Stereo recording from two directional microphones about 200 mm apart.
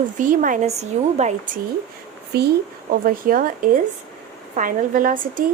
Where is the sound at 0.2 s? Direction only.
40° right (ahead or behind).